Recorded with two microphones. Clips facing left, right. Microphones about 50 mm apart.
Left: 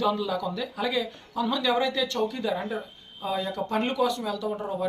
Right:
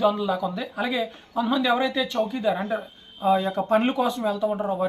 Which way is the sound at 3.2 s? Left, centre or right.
Right.